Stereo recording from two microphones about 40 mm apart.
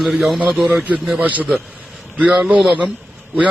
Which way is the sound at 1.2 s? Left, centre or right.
Right.